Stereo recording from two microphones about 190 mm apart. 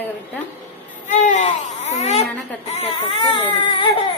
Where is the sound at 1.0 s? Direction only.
40° left (ahead or behind).